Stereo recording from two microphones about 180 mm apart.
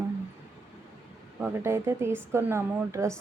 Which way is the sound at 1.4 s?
15° right (ahead or behind).